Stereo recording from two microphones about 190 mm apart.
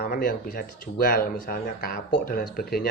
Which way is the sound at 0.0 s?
50° left (ahead or behind).